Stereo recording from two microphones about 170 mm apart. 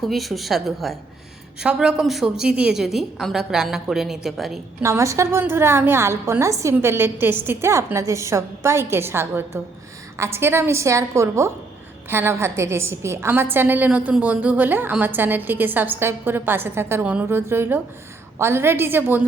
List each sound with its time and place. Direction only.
0.0 s a woman's voice: centre (ahead or behind)
4.8 s a woman's voice: 15° right (ahead or behind)